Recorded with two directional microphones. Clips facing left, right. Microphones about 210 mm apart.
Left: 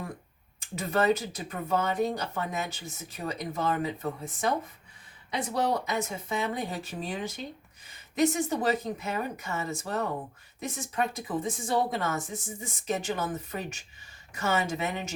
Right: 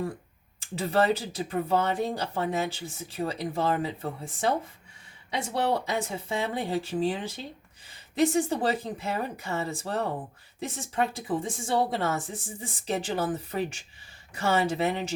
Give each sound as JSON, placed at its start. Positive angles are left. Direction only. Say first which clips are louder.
{"t": 0.6, "sound": "speech", "louder": "right 2 dB", "side_deg": -30}
{"t": 5.7, "sound": "speech", "louder": "right 1 dB", "side_deg": -30}